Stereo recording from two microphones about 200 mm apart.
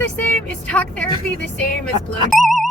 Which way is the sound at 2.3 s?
Centre (ahead or behind).